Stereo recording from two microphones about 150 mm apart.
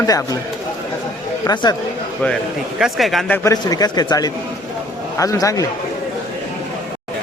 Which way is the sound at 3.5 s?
25° left (ahead or behind).